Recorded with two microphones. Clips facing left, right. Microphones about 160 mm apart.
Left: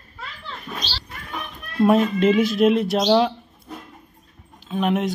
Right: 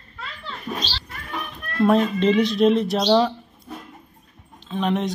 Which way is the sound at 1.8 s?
5° left (ahead or behind).